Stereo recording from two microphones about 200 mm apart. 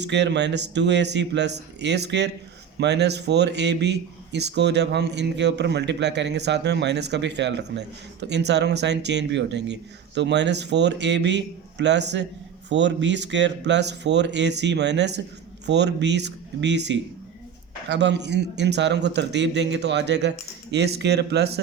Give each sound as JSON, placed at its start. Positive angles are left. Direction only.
{"t": 0.0, "sound": "speech", "side_deg": -60}